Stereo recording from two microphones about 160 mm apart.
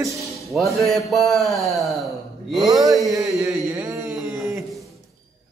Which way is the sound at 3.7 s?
20° right (ahead or behind).